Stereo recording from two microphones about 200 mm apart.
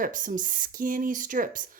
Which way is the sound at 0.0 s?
40° right (ahead or behind).